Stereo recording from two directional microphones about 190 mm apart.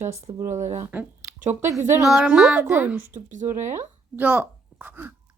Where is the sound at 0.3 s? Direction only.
20° right (ahead or behind).